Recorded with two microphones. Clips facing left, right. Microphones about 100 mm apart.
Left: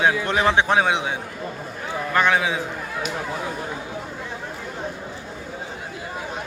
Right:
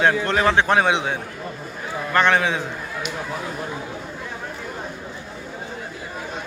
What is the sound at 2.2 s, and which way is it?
Speech, 5° left (ahead or behind).